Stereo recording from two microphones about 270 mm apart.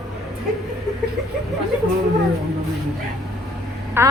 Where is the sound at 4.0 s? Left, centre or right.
Centre.